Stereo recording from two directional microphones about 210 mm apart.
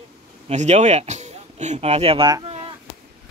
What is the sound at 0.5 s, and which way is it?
Speech, 35° right (ahead or behind).